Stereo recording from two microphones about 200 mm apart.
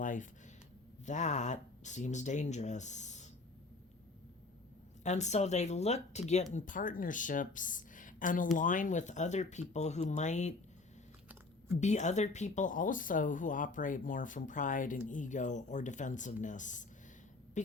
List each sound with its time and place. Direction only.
0.0 s a sound: 40° left (ahead or behind)
1.0 s speech: 35° left (ahead or behind)
5.0 s speech: 35° left (ahead or behind)
11.8 s speech: 35° left (ahead or behind)